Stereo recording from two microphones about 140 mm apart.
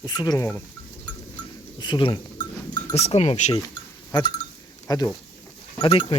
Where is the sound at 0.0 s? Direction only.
30° left (ahead or behind).